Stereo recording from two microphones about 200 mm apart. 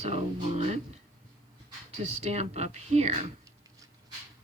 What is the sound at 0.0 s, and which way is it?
Speech, 30° right (ahead or behind).